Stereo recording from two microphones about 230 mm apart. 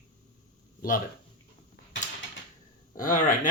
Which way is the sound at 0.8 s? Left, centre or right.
Left.